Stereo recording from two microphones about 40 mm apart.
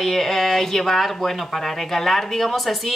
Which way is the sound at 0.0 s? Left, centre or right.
Centre.